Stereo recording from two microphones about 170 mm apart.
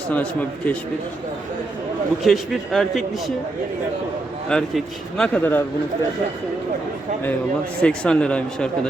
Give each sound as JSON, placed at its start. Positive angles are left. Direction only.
{"t": 0.1, "sound": "speech", "side_deg": 10}
{"t": 2.2, "sound": "speech", "side_deg": 0}
{"t": 4.4, "sound": "speech", "side_deg": 5}
{"t": 7.8, "sound": "speech", "side_deg": 5}